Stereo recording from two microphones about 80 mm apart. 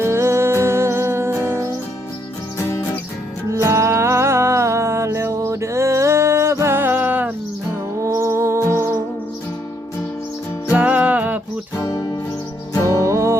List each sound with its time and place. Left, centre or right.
0.0 s music: right
2.6 s music: left
3.5 s music: right
8.0 s music: right
10.7 s music: centre
12.7 s music: left
13.1 s music: right